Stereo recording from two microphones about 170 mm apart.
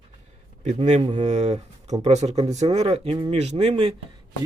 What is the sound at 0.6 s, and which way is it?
Speech, 40° right (ahead or behind).